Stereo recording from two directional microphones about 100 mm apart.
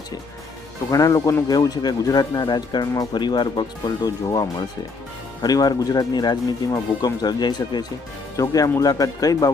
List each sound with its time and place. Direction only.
0.9 s speech: 35° left (ahead or behind)
8.4 s speech: 35° left (ahead or behind)